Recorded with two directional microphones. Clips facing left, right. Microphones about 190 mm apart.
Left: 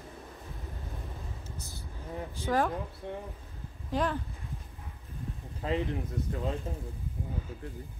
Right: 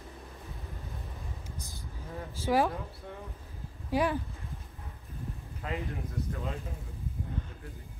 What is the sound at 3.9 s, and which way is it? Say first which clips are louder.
Speech: right 2 dB; 10° right (ahead or behind).